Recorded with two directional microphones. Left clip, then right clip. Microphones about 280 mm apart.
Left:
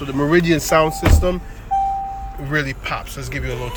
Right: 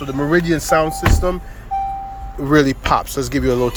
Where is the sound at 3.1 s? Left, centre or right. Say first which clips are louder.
Right 9 dB; centre.